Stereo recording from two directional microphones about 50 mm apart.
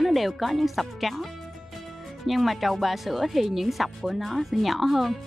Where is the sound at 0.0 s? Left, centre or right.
Centre.